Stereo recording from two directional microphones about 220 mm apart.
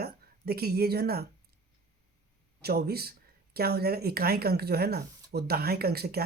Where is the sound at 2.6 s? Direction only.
45° right (ahead or behind).